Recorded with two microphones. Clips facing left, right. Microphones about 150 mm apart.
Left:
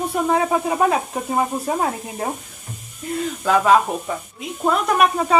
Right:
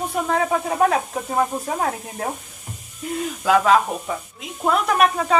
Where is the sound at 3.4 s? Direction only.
Centre (ahead or behind).